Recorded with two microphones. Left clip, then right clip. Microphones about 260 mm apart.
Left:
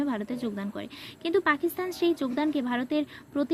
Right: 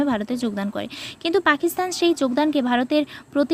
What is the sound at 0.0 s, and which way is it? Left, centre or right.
A woman's voice, centre.